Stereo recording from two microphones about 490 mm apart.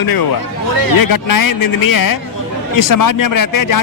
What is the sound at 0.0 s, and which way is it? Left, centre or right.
A man's voice, left.